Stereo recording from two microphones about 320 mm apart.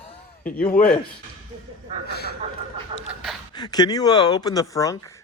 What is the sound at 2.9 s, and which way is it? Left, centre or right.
Pant, centre.